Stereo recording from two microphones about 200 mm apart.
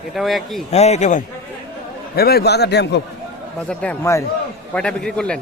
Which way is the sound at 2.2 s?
50° left (ahead or behind).